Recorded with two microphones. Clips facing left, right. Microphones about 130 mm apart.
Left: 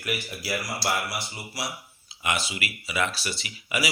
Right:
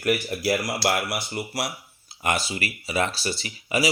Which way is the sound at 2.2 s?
40° right (ahead or behind).